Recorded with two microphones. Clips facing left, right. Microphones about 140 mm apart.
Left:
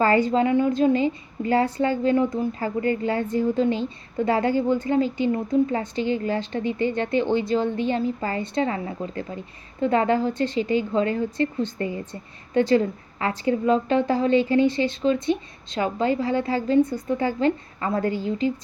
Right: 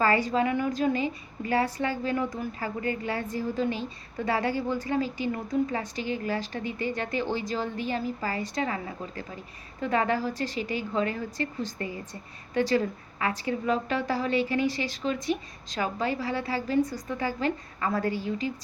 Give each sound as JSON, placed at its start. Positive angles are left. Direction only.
{"t": 0.0, "sound": "speech", "side_deg": 25}